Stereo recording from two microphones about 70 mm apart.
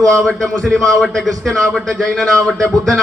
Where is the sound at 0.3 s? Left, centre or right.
Centre.